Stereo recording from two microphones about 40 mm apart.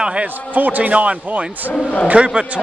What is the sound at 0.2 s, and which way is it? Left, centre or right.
A man's voice, right.